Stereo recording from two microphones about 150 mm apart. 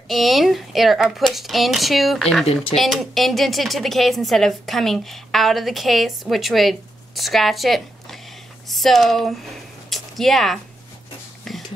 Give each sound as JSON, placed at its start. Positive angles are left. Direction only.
{"t": 0.1, "sound": "a woman's voice", "side_deg": 0}
{"t": 2.4, "sound": "speech", "side_deg": 40}
{"t": 2.7, "sound": "a woman's voice", "side_deg": 0}
{"t": 11.5, "sound": "a sound", "side_deg": 0}